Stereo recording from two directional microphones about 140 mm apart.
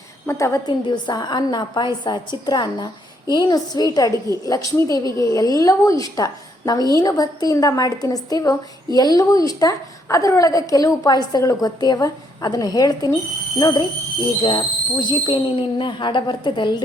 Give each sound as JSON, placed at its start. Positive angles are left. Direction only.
{"t": 0.3, "sound": "a woman's voice", "side_deg": 20}